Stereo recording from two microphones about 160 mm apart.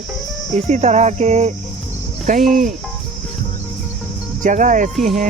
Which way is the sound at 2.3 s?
Centre (ahead or behind).